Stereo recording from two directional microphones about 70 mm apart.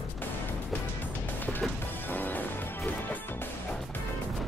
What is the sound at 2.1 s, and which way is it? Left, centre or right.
Music, left.